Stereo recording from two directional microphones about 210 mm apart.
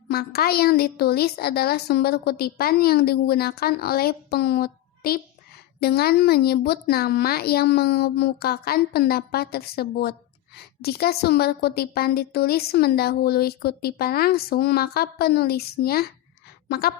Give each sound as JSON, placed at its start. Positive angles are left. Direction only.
{"t": 0.1, "sound": "a woman's voice", "side_deg": 50}